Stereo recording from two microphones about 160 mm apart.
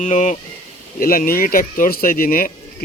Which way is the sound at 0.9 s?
60° left (ahead or behind).